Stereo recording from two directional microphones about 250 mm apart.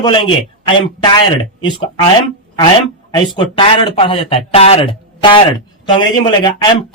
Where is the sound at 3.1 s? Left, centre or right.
Centre.